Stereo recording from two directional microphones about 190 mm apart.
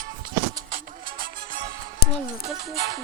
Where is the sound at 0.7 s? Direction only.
50° right (ahead or behind).